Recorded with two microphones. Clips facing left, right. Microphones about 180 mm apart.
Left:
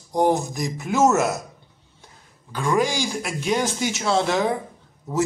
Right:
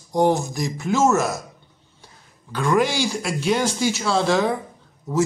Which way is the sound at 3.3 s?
15° left (ahead or behind).